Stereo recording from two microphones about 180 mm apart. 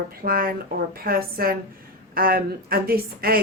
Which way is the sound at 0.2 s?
55° right (ahead or behind).